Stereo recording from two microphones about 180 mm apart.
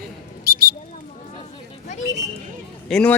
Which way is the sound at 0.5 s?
60° right (ahead or behind).